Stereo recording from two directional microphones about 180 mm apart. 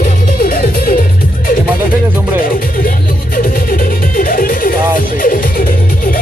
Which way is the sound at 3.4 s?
50° left (ahead or behind).